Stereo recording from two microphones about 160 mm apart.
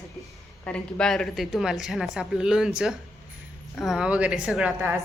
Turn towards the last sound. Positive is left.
turn(degrees=-10)  # may be behind; listen again after turning